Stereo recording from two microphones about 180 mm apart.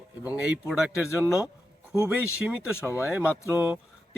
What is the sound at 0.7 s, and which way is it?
Speech, centre (ahead or behind).